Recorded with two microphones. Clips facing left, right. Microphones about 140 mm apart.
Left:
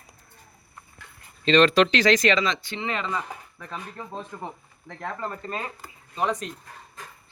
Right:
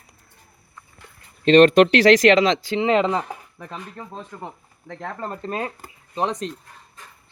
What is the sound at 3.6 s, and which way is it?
Speech, 30° right (ahead or behind).